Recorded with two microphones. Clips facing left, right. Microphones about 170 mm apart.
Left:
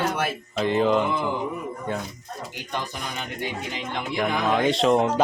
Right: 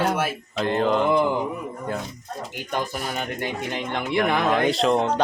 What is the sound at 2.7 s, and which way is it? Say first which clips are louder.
Speech: right 4 dB; 45° right (ahead or behind).